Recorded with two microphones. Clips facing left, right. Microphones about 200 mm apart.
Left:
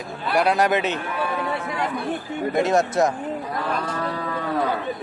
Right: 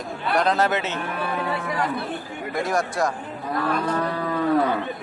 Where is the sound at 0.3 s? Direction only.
10° left (ahead or behind).